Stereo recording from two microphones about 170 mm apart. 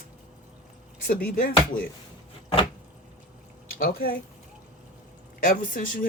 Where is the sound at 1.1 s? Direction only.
55° left (ahead or behind).